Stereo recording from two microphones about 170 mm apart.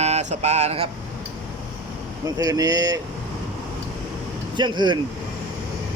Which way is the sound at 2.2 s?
20° right (ahead or behind).